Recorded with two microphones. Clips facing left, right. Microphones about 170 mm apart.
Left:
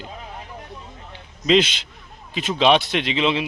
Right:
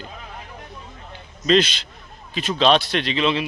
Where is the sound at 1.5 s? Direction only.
15° left (ahead or behind).